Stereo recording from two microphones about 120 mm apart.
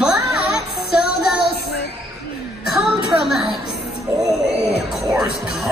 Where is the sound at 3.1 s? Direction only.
Centre (ahead or behind).